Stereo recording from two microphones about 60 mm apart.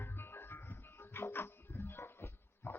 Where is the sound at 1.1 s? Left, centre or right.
Left.